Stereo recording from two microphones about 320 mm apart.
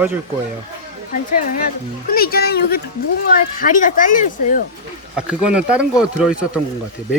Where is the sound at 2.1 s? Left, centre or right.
Left.